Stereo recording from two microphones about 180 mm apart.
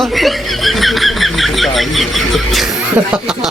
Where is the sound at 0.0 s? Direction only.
Centre (ahead or behind).